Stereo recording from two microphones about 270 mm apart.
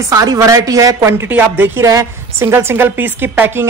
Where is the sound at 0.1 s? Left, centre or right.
Centre.